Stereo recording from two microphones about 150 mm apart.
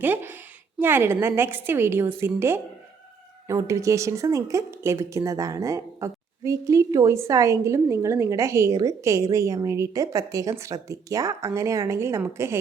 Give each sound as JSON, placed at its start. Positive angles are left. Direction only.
{"t": 0.0, "sound": "a woman's voice", "side_deg": -15}